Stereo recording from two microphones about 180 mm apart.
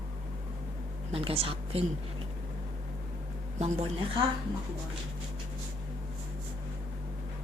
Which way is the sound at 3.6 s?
35° right (ahead or behind).